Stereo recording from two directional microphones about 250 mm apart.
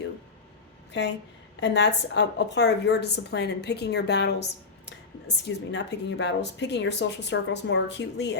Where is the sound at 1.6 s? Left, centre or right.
Left.